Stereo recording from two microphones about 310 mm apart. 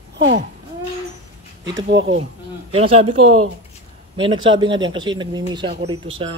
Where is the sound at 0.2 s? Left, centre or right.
Right.